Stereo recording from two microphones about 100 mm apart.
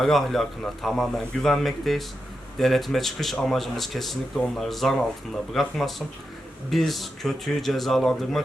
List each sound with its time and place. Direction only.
0.0 s a man's voice: 5° left (ahead or behind)